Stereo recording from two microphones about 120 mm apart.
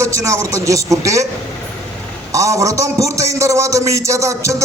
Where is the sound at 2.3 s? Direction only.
25° right (ahead or behind).